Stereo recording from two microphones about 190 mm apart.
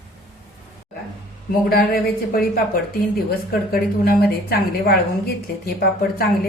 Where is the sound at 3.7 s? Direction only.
50° left (ahead or behind).